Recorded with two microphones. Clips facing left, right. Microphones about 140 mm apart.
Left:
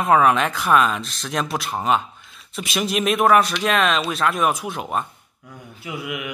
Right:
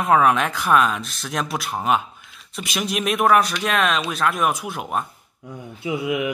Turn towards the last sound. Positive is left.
turn(degrees=-25)  # may be behind; listen again after turning